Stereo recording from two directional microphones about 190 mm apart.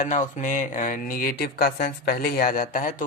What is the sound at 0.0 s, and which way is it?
Speech, 40° left (ahead or behind).